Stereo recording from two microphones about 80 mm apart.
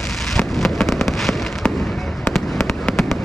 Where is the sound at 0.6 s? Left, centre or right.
Centre.